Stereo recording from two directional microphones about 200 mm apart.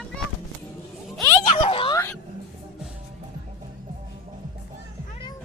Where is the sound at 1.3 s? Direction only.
25° left (ahead or behind).